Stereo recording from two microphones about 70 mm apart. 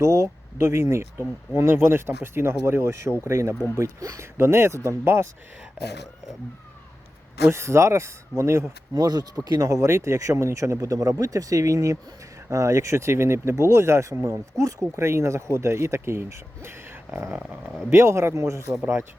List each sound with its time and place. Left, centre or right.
0.0 s speech: right
7.4 s speech: right
9.0 s speech: right
16.6 s a sound: right
17.3 s speech: centre
17.9 s speech: right